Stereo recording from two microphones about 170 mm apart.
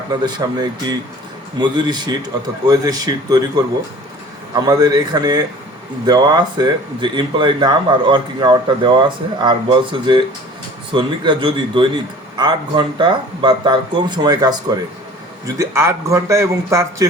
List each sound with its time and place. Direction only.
0.2 s speech: 25° right (ahead or behind)
4.6 s a man's voice: 20° right (ahead or behind)